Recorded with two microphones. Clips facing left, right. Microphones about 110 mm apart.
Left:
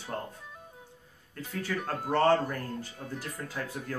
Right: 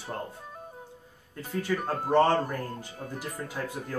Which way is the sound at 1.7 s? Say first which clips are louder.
Right 5 dB; 20° right (ahead or behind).